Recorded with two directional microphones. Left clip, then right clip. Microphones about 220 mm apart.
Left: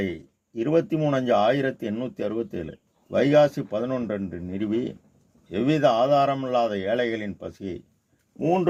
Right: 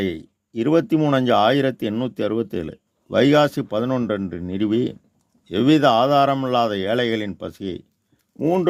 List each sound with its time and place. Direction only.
0.0 s speech: 45° right (ahead or behind)